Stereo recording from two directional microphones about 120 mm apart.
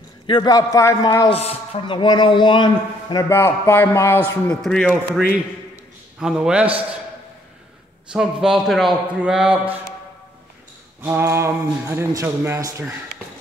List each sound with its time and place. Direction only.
0.3 s speech: 35° left (ahead or behind)
1.3 s speech: 55° left (ahead or behind); by 3.3 s 40° left (ahead or behind)
3.3 s a man's voice: 20° left (ahead or behind)
6.1 s a man's voice: 5° right (ahead or behind)
8.1 s a man's voice: 5° right (ahead or behind)
11.0 s speech: 20° right (ahead or behind)
13.2 s a sound: 15° left (ahead or behind)